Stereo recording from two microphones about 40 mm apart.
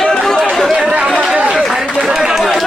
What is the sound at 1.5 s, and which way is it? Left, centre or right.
Chatter, centre.